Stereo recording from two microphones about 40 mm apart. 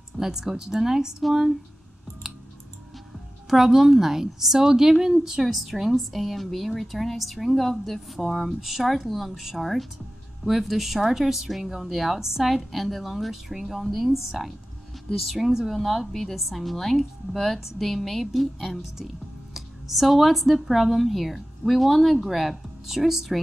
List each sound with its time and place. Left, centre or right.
0.2 s a woman's voice: centre
3.4 s a woman's voice: centre
12.4 s a woman's voice: centre